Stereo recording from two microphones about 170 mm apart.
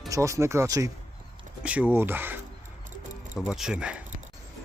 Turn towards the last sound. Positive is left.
turn(degrees=-5)  # may be behind; listen again after turning